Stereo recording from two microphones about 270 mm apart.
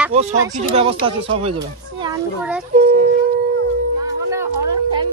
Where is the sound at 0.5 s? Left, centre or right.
Right.